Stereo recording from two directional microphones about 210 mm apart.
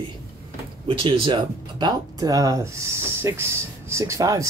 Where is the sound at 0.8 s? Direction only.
25° right (ahead or behind).